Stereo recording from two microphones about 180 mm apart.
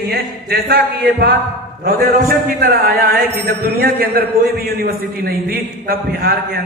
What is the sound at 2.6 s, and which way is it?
A man's voice, 55° right (ahead or behind).